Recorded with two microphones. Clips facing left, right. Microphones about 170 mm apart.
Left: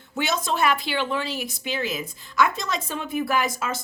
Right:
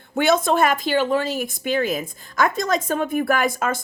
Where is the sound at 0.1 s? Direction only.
55° right (ahead or behind).